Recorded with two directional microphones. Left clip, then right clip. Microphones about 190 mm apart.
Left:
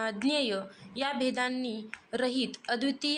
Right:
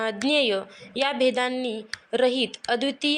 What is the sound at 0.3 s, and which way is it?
Speech, 20° right (ahead or behind).